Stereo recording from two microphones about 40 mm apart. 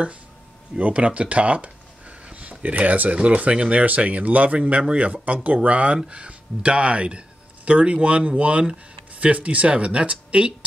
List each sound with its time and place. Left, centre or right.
0.7 s a sound: right
2.6 s speech: right
5.9 s speech: right